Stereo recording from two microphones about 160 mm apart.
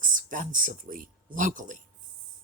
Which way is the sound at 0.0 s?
55° right (ahead or behind).